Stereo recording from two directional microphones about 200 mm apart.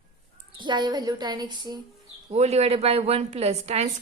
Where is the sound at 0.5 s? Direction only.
25° right (ahead or behind).